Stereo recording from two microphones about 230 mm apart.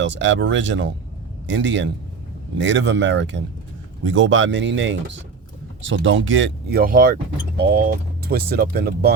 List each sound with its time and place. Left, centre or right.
0.0 s speech: right